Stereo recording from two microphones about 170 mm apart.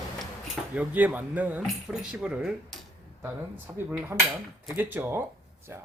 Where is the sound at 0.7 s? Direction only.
10° right (ahead or behind).